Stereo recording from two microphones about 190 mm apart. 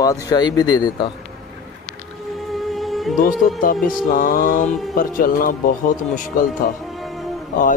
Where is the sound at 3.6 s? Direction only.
50° left (ahead or behind).